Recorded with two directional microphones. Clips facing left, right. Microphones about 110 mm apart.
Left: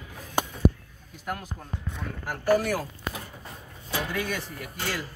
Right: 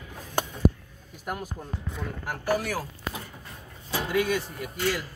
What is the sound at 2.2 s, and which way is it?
Speech, 5° right (ahead or behind).